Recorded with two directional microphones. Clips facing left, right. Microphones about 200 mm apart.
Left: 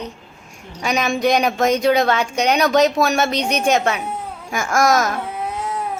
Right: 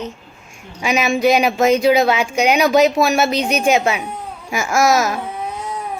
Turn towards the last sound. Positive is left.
turn(degrees=-10)  # may be behind; listen again after turning